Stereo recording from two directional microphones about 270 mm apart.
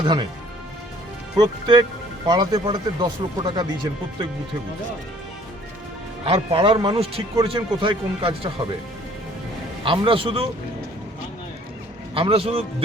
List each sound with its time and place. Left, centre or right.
0.0 s speech: centre
1.4 s speech: centre
6.2 s speech: right
9.8 s speech: centre
12.1 s speech: centre